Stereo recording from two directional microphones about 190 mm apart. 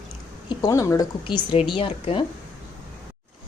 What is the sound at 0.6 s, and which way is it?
Speech, 15° left (ahead or behind).